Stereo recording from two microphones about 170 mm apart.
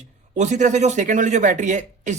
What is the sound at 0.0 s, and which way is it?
A man's voice, 45° right (ahead or behind).